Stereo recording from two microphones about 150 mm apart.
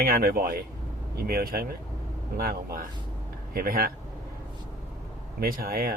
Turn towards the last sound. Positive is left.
turn(degrees=-80)